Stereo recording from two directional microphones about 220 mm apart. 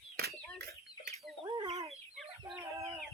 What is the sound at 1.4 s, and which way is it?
Chicken, 20° right (ahead or behind).